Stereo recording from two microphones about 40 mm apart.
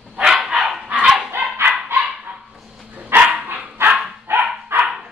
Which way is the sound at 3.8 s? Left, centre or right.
Right.